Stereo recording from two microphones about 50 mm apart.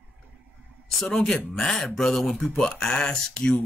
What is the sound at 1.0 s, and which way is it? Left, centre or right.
Speech, centre.